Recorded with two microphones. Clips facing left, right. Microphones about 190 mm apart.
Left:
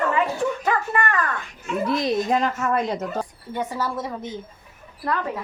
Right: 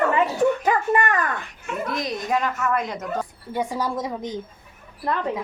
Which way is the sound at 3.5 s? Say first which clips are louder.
Right 2 dB; 10° right (ahead or behind).